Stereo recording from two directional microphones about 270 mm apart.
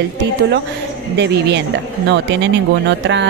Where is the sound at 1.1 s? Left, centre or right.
Right.